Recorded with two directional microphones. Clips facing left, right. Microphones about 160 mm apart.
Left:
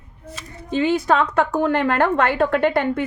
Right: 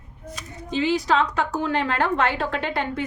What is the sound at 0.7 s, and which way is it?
A woman's voice, 55° left (ahead or behind).